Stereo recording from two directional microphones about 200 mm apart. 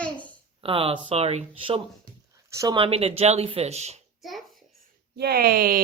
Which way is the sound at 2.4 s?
15° right (ahead or behind).